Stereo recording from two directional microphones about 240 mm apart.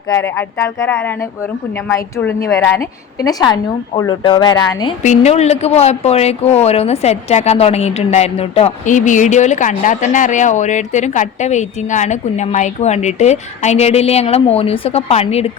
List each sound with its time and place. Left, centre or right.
0.1 s a woman's voice: centre